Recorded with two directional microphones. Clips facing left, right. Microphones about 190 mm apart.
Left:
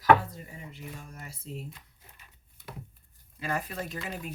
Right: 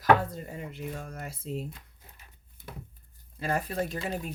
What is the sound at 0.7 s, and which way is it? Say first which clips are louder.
Speech: right 6 dB; 65° right (ahead or behind).